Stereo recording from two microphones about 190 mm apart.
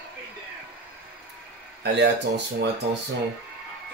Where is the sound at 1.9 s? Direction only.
65° right (ahead or behind).